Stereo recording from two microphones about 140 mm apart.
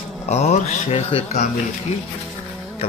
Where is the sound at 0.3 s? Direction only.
50° left (ahead or behind).